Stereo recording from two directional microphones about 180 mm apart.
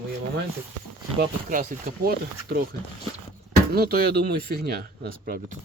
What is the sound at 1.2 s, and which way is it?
Speech, 45° right (ahead or behind).